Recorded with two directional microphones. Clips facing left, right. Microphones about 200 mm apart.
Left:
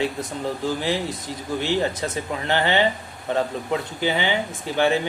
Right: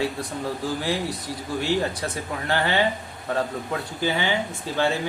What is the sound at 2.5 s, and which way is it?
Speech, 20° left (ahead or behind).